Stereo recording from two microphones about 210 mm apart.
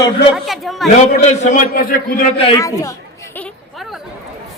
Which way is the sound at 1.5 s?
40° left (ahead or behind).